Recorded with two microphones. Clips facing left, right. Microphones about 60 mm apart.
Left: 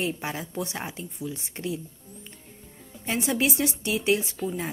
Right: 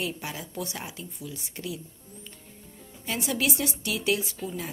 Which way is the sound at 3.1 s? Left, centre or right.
Left.